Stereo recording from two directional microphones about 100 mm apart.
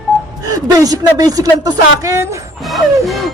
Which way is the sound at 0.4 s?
35° right (ahead or behind).